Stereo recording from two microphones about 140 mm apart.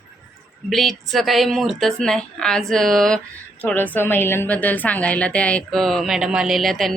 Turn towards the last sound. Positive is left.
turn(degrees=0)  # may be behind; listen again after turning